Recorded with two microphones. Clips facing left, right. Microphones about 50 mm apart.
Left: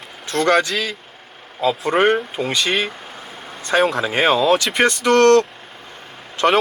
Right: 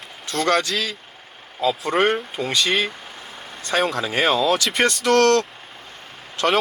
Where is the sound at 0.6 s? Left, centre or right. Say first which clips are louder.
Left 2 dB; centre.